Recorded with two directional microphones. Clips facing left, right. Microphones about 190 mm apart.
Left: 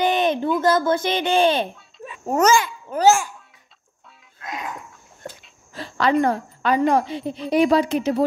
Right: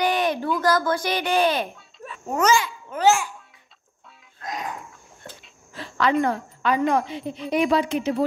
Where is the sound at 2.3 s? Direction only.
45° left (ahead or behind).